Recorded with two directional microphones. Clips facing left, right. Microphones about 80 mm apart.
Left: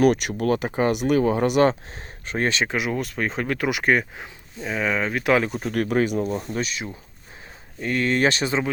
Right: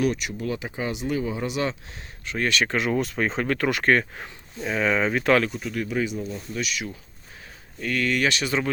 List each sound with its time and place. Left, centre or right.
0.0 s speech: left
1.9 s speech: left
2.6 s speech: centre
5.5 s speech: left
5.7 s speech: left
6.5 s speech: left